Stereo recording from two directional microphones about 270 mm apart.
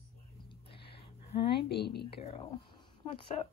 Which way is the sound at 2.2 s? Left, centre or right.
Left.